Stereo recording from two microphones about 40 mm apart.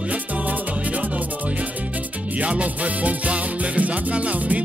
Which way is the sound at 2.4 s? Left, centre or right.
Right.